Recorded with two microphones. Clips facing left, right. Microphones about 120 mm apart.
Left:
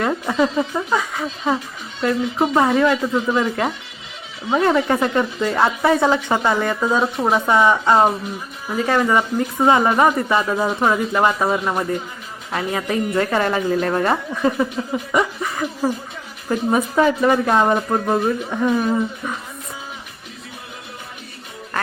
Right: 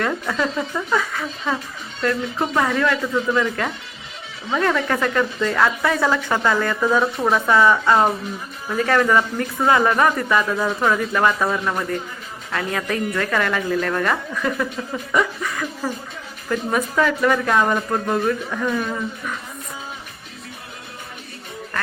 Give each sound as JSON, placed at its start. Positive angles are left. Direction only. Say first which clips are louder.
{"t": 0.0, "sound": "a woman's voice", "louder": "left 3 dB", "side_deg": 20}